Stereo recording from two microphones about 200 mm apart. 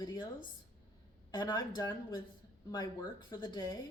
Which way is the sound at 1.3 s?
20° left (ahead or behind).